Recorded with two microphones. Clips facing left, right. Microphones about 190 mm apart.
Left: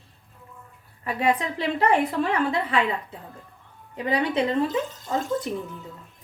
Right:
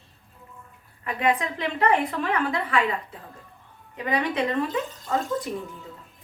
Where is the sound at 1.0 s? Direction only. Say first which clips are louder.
Left 1 dB; 30° left (ahead or behind).